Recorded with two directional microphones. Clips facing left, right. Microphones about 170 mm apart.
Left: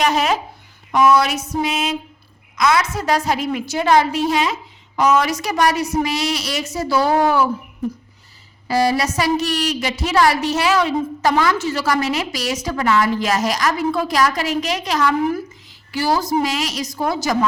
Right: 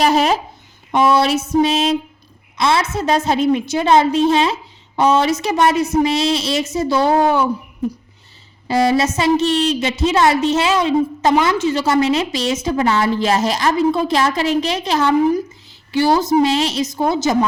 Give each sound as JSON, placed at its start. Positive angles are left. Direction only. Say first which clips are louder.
{"t": 0.0, "sound": "a woman's voice", "louder": "right 3 dB", "side_deg": -35}
{"t": 8.6, "sound": "a woman's voice", "louder": "right 3 dB", "side_deg": -25}